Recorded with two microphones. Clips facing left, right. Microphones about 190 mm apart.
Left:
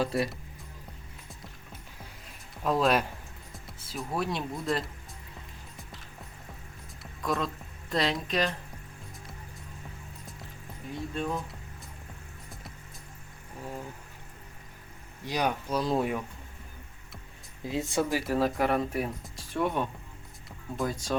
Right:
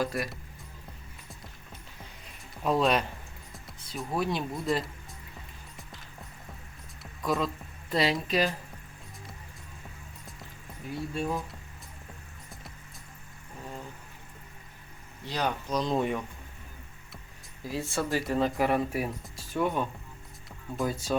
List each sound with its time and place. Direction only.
0.0 s speech: 30° left (ahead or behind)
2.6 s speech: centre (ahead or behind)
7.0 s speech: centre (ahead or behind)
10.9 s speech: 10° right (ahead or behind)
15.2 s speech: 10° left (ahead or behind)
17.6 s speech: 20° left (ahead or behind)
18.2 s speech: 5° left (ahead or behind)